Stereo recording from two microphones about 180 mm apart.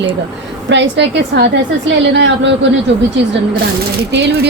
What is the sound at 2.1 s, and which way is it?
Speech, 85° right.